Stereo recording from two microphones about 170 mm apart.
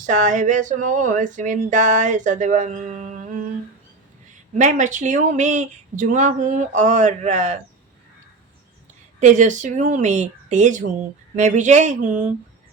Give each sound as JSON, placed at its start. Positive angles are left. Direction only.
{"t": 0.0, "sound": "speech", "side_deg": -45}
{"t": 9.2, "sound": "speech", "side_deg": -45}